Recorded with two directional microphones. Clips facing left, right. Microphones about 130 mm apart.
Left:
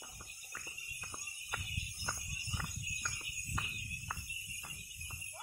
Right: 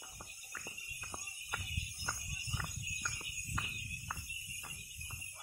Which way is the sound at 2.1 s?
Centre (ahead or behind).